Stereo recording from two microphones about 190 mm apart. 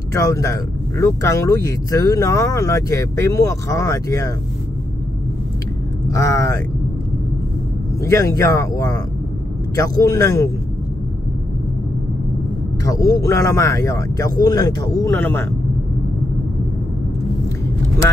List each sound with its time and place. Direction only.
0.1 s speech: 15° left (ahead or behind)
6.0 s speech: 20° left (ahead or behind)
8.0 s speech: 15° left (ahead or behind)
12.8 s speech: 20° left (ahead or behind)